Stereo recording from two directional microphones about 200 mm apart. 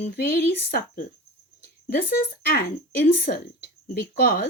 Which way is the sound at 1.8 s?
50° left (ahead or behind).